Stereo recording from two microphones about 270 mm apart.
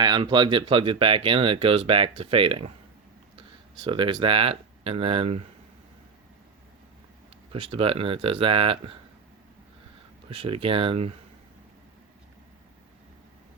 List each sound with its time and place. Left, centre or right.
0.0 s speech: centre
7.5 s speech: centre
10.2 s speech: centre